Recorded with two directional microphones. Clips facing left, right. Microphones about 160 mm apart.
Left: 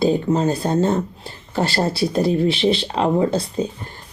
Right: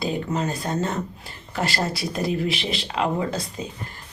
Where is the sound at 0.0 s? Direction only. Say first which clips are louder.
Left 8 dB; 30° left (ahead or behind).